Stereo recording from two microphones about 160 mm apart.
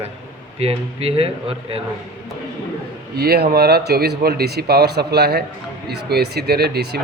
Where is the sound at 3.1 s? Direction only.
90° right.